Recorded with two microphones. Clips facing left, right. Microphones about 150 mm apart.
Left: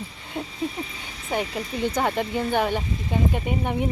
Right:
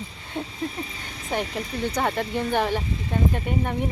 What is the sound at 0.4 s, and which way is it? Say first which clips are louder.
Speech: left 1 dB; 5° left (ahead or behind).